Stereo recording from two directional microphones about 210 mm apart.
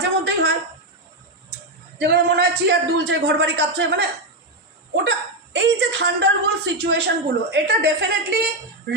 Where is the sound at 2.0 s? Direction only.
50° right (ahead or behind).